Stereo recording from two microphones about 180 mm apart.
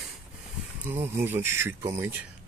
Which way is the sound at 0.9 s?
10° right (ahead or behind).